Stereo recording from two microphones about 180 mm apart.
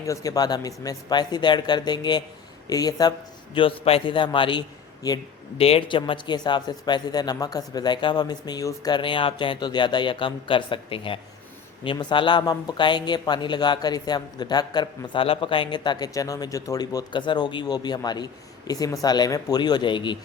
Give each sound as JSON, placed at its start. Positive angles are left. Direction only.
{"t": 0.0, "sound": "speech", "side_deg": 20}